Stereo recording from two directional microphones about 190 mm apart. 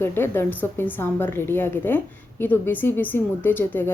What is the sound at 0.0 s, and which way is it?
A woman's voice, 10° left (ahead or behind).